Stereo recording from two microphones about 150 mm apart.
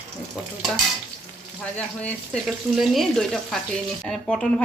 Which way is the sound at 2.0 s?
10° left (ahead or behind).